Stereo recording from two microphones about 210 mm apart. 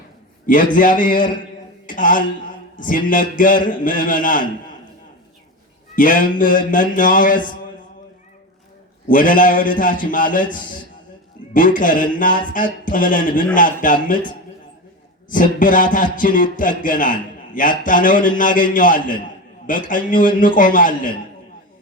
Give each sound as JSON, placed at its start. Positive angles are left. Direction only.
{"t": 0.4, "sound": "a man's voice", "side_deg": 40}
{"t": 6.0, "sound": "a man's voice", "side_deg": 40}
{"t": 9.0, "sound": "a man's voice", "side_deg": 40}
{"t": 15.3, "sound": "a man's voice", "side_deg": 40}